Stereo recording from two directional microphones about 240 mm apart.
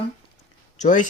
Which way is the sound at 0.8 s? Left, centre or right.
Left.